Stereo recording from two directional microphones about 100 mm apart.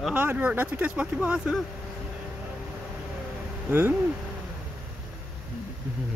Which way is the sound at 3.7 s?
20° right (ahead or behind).